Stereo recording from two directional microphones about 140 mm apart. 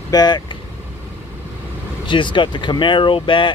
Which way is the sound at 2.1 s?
35° left (ahead or behind).